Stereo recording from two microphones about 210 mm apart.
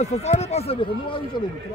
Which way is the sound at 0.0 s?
30° left (ahead or behind).